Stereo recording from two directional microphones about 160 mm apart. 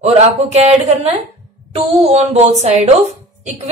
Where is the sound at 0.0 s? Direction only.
40° right (ahead or behind).